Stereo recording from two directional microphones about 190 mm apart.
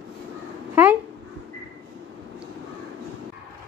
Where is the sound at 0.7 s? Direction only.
10° right (ahead or behind).